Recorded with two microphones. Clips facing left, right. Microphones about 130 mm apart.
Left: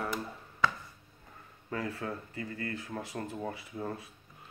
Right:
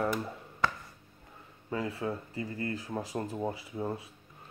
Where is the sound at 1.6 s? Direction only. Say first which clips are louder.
Right 3 dB; 20° right (ahead or behind).